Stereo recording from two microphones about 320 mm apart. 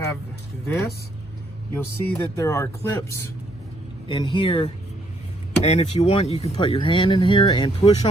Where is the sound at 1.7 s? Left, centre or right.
Centre.